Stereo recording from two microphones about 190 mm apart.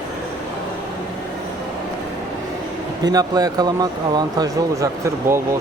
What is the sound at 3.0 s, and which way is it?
Speech, 20° right (ahead or behind).